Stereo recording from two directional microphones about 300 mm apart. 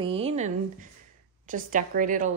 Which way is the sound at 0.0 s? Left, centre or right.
Centre.